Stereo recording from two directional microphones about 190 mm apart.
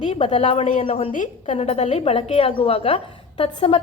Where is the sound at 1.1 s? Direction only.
40° left (ahead or behind).